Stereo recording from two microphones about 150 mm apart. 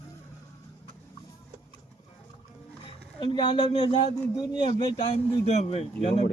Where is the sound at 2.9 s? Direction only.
30° left (ahead or behind).